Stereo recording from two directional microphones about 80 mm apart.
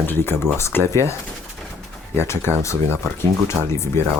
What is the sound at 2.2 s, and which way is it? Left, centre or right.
Speech, left.